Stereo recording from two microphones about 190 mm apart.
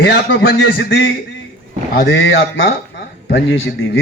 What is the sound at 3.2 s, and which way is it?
Speech, 85° left.